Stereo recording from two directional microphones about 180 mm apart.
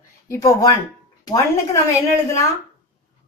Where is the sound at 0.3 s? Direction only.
15° left (ahead or behind).